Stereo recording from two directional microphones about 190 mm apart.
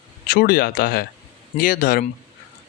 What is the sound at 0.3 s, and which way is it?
Speech, 50° left (ahead or behind).